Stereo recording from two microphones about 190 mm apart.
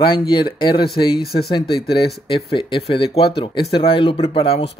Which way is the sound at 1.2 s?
55° left (ahead or behind).